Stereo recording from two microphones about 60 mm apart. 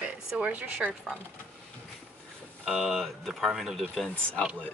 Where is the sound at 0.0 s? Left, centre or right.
Right.